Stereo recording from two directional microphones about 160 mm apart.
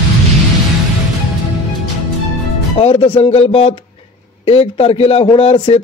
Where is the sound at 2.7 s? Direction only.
40° left (ahead or behind).